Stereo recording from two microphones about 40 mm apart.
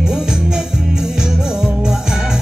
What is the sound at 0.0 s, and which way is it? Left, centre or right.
Music, centre.